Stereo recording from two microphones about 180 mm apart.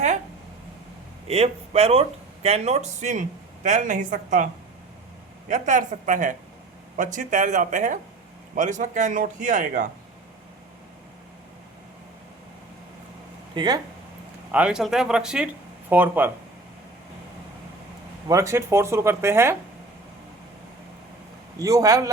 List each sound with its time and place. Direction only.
1.3 s speech: 35° right (ahead or behind)
5.5 s a man's voice: 45° right (ahead or behind)
13.5 s speech: 25° right (ahead or behind)
14.5 s speech: 5° right (ahead or behind)
18.3 s speech: 15° right (ahead or behind)
21.6 s a man's voice: 20° right (ahead or behind)